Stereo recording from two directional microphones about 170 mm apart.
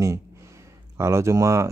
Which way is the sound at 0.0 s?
15° right (ahead or behind).